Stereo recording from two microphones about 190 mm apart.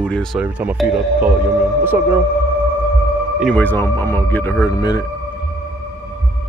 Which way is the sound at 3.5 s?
10° left (ahead or behind).